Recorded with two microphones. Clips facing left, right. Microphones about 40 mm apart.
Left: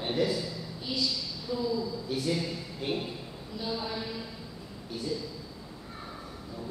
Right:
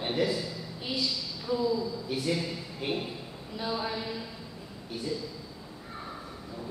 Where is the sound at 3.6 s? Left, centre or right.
Centre.